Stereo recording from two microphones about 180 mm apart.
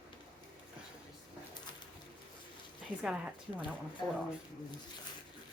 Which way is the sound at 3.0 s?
5° right (ahead or behind).